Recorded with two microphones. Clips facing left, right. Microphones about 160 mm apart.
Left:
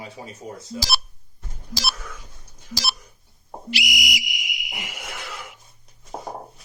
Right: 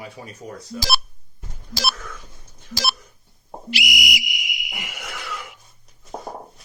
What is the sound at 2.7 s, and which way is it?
Telephone dialing, 55° right (ahead or behind).